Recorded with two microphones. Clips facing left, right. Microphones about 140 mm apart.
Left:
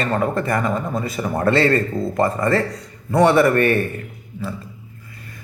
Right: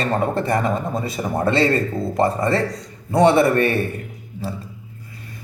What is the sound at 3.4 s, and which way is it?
Speech, 50° left (ahead or behind).